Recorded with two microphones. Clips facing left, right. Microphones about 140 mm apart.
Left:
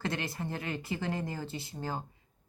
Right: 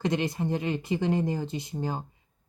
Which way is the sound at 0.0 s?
20° right (ahead or behind).